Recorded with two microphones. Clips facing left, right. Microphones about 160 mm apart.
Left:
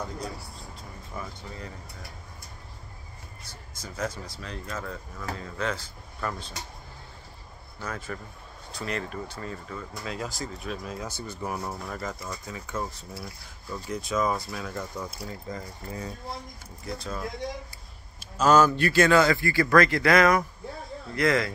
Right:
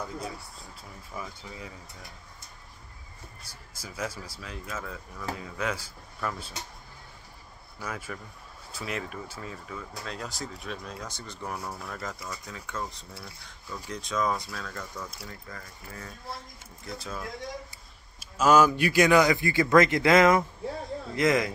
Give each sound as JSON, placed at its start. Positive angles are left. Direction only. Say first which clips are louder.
{"t": 1.1, "sound": "speech", "louder": "left 1 dB", "side_deg": -5}
{"t": 3.4, "sound": "a man's voice", "louder": "left 3 dB", "side_deg": -10}
{"t": 7.8, "sound": "a man's voice", "louder": "left 2 dB", "side_deg": -10}
{"t": 16.8, "sound": "speech", "louder": "left 3 dB", "side_deg": 0}
{"t": 18.2, "sound": "a man's voice", "louder": "left 1 dB", "side_deg": -10}